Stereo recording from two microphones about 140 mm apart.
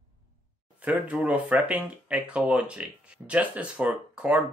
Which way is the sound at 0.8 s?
10° right (ahead or behind).